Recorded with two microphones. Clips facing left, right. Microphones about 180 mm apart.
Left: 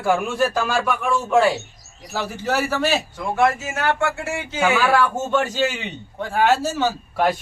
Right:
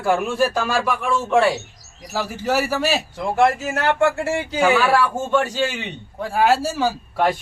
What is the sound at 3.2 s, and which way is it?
Speech, 30° right (ahead or behind).